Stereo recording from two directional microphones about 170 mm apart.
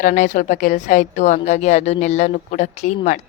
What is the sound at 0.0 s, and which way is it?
A woman's voice, 50° left (ahead or behind).